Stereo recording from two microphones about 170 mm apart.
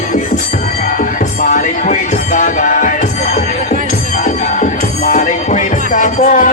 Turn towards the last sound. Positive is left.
turn(degrees=50)  # may be behind; listen again after turning